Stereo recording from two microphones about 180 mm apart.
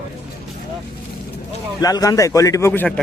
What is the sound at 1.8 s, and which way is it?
Speech, 20° left (ahead or behind).